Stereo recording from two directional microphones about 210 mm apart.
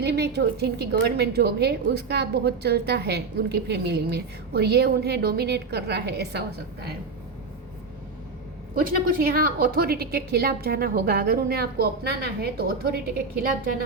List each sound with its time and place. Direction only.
0.0 s a woman's voice: 50° right (ahead or behind)
8.7 s a woman's voice: 40° right (ahead or behind)